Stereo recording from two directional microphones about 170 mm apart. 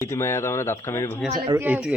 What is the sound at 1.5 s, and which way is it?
Speech, 10° right (ahead or behind).